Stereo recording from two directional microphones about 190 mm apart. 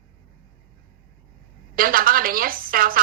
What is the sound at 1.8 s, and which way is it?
A woman's voice, 50° right (ahead or behind).